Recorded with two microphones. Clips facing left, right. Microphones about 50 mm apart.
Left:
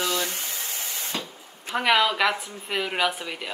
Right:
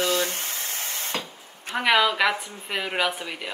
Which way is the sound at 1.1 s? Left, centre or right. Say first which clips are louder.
Right 1 dB; right.